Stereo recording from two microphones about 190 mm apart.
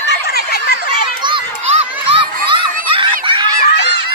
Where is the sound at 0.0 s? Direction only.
55° left (ahead or behind).